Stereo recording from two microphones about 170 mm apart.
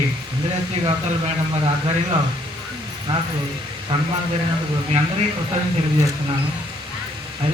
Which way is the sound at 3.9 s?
35° right (ahead or behind).